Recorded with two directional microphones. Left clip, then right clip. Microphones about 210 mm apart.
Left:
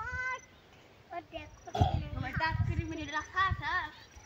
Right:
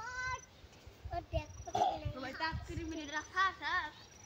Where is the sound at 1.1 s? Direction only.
60° right (ahead or behind).